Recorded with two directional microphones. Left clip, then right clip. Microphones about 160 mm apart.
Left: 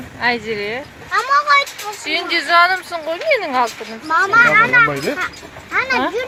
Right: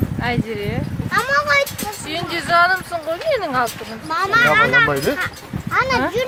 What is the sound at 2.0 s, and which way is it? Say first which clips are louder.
Speech: left 4 dB; 5° left (ahead or behind).